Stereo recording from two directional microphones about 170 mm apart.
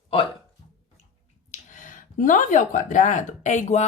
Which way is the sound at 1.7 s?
50° left (ahead or behind).